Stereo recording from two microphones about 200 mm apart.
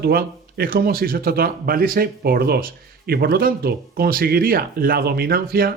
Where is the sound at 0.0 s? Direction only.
50° right (ahead or behind).